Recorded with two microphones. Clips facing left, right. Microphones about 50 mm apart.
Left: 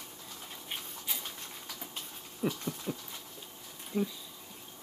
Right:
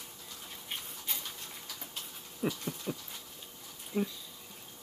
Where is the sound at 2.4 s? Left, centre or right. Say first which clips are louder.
Left 1 dB; centre.